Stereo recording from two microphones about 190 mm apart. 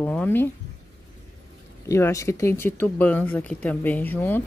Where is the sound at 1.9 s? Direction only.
15° left (ahead or behind).